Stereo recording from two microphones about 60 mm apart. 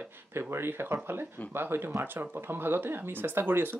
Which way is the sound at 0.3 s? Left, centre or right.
Right.